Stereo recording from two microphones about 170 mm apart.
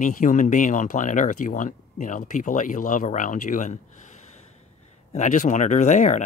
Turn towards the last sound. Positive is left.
turn(degrees=45)  # may be behind; listen again after turning